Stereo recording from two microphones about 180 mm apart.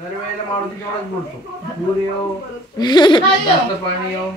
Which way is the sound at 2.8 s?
25° left (ahead or behind).